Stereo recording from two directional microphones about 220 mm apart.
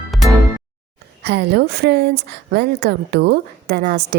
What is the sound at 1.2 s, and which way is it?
A woman's voice, 50° right (ahead or behind).